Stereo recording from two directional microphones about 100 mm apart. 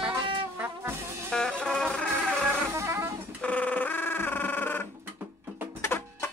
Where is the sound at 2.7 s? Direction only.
25° right (ahead or behind).